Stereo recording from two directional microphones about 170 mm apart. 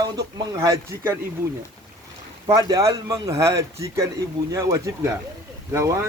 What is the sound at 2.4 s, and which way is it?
A man's voice, 20° right (ahead or behind).